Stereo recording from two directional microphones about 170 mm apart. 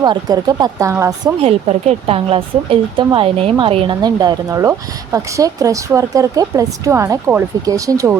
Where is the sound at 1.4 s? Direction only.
40° right (ahead or behind).